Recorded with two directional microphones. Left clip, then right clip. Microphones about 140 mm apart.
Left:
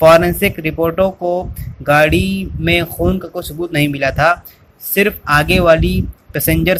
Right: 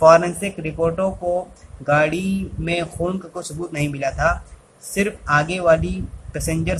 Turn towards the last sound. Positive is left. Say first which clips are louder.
# left 9 dB
turn(degrees=30)  # may be behind; listen again after turning